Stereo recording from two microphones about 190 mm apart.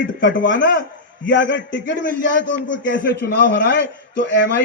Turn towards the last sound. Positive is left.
turn(degrees=70)  # may be behind; listen again after turning